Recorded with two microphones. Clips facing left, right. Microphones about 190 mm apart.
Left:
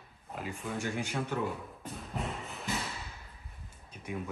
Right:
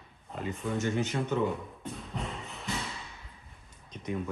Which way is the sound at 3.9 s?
5° left (ahead or behind).